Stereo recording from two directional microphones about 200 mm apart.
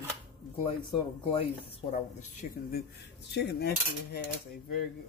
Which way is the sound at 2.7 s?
60° left (ahead or behind).